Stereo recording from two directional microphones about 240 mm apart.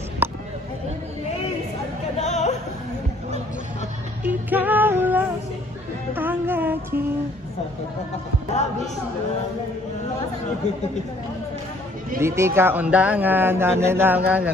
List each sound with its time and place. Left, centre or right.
0.2 s chop: centre
2.1 s music: left
4.2 s music: centre
12.2 s speech: centre